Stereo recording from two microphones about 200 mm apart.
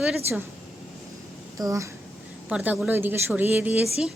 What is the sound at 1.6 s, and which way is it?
Speech, 20° right (ahead or behind).